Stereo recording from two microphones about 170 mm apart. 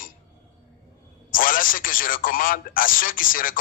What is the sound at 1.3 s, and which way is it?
Speech, 55° left (ahead or behind).